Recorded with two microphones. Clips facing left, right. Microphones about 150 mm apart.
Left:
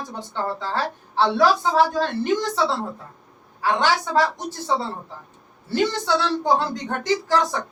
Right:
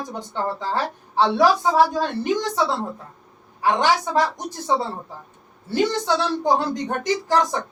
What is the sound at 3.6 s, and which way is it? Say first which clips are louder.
A woman's voice: right 2 dB; 15° right (ahead or behind).